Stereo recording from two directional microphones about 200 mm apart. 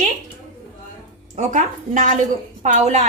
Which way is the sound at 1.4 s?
40° right (ahead or behind).